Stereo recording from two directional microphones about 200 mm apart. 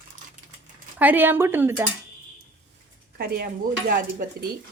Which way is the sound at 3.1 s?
50° right (ahead or behind).